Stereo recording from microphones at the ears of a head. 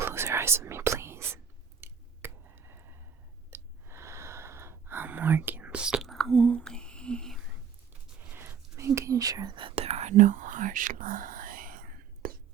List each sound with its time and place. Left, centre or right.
0.0 s whispering: right
1.8 s a sound: right
3.5 s gasp: right
6.5 s whispering: right